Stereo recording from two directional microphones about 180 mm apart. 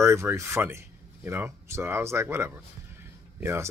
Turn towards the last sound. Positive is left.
turn(degrees=-15)  # may be behind; listen again after turning